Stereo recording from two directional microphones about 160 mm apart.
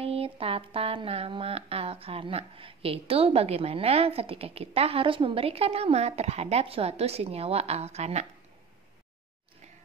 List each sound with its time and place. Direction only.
0.0 s speech: 35° right (ahead or behind)